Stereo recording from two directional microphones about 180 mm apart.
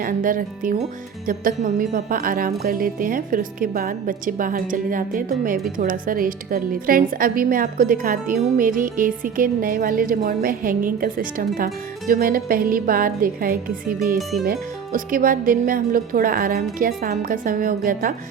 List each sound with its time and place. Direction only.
0.0 s speech: 50° right (ahead or behind)
14.2 s speech: centre (ahead or behind)
14.4 s speech: 55° right (ahead or behind)